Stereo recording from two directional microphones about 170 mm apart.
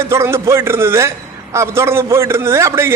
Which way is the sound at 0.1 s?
15° right (ahead or behind).